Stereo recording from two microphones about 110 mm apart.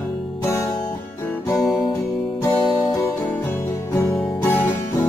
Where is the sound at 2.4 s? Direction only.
25° left (ahead or behind).